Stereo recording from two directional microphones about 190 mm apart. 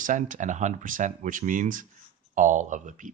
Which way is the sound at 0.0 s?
40° right (ahead or behind).